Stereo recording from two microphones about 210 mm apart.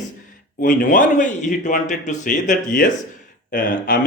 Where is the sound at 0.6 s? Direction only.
40° left (ahead or behind).